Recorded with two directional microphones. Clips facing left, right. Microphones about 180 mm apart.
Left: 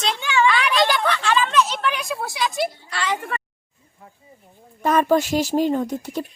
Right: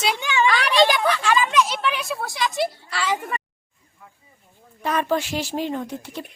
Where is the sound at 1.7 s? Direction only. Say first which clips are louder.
Left 1 dB; centre (ahead or behind).